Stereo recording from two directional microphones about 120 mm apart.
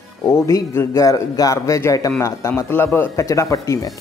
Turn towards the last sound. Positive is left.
turn(degrees=25)  # may be behind; listen again after turning